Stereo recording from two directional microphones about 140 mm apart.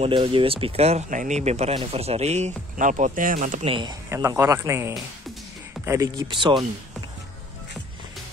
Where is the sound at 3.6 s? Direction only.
35° right (ahead or behind).